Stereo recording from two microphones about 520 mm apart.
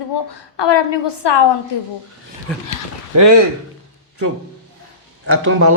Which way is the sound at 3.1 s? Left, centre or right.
Right.